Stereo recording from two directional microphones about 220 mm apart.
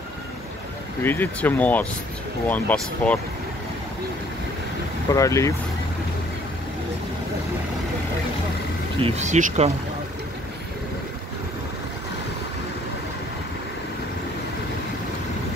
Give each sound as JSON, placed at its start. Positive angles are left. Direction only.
{"t": 1.0, "sound": "speech", "side_deg": 10}
{"t": 5.1, "sound": "speech", "side_deg": 15}
{"t": 9.0, "sound": "speech", "side_deg": -30}